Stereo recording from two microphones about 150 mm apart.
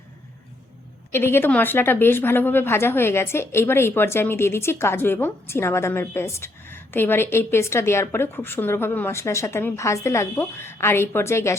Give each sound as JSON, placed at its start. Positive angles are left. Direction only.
{"t": 1.1, "sound": "a woman's voice", "side_deg": 15}